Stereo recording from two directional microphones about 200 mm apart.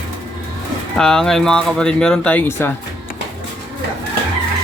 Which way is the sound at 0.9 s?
5° left (ahead or behind).